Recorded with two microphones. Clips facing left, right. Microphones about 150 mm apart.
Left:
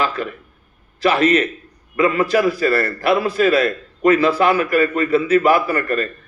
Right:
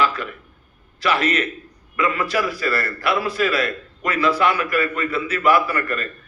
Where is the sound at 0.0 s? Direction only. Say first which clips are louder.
Even; 35° left (ahead or behind).